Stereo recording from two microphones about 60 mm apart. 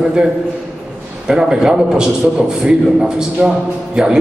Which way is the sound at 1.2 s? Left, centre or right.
Centre.